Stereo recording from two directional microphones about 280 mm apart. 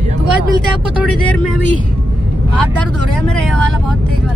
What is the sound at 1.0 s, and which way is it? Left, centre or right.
Speech, centre.